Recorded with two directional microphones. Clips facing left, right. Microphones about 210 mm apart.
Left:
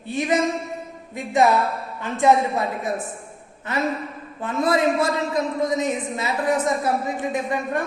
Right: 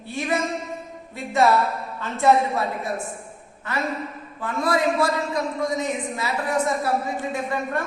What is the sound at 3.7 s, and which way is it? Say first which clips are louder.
A man's voice: left 3 dB; 20° left (ahead or behind).